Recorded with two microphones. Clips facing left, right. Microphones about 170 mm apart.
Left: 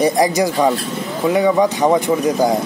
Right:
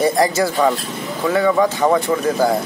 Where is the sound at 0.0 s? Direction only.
15° left (ahead or behind).